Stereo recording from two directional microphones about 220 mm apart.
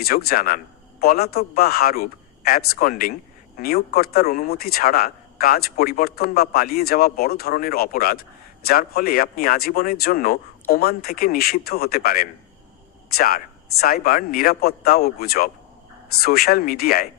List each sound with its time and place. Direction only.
0.0 s speech: 45° left (ahead or behind)